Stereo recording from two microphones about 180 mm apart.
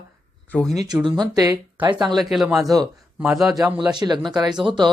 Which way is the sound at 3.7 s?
25° right (ahead or behind).